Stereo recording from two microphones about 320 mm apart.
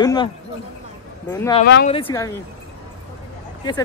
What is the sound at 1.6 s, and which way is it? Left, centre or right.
Speech, left.